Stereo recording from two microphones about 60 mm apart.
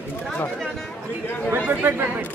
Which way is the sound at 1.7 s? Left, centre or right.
Right.